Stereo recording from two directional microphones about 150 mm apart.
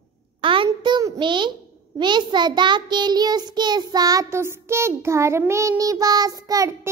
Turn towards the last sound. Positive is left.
turn(degrees=-25)  # may be behind; listen again after turning